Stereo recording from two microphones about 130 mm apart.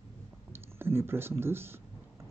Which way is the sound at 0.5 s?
20° right (ahead or behind).